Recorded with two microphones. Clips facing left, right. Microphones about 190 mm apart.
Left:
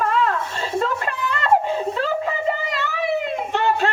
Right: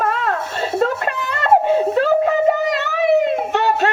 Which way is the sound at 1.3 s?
45° right (ahead or behind).